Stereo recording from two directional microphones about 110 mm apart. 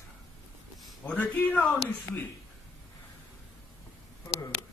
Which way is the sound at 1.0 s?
15° left (ahead or behind).